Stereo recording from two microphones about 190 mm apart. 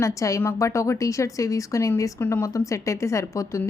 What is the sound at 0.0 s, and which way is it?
A woman's voice, 15° left (ahead or behind).